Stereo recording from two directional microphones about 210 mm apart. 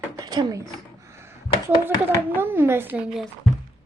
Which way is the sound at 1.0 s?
15° right (ahead or behind).